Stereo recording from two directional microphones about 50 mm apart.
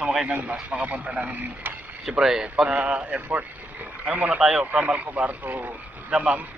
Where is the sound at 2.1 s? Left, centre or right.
Centre.